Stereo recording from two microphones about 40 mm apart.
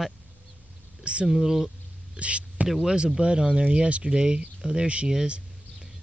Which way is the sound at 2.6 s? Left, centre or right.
Centre.